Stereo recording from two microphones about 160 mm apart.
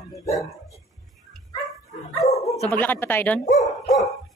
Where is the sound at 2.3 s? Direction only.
20° left (ahead or behind).